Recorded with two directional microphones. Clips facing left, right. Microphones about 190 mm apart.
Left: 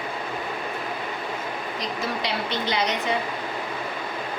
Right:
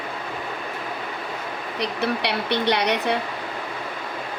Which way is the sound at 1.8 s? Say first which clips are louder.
Right 5 dB; 65° right (ahead or behind).